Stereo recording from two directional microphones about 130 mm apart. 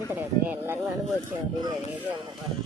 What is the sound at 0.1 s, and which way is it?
Speech, 15° right (ahead or behind).